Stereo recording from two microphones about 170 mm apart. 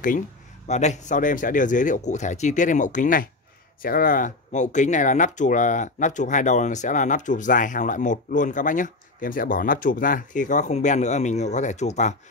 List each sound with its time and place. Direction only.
0.7 s speech: 40° left (ahead or behind)